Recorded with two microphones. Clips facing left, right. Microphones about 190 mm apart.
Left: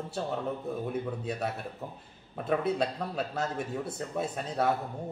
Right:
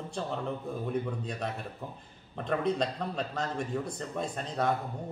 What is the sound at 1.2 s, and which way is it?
A man's voice, 5° left (ahead or behind).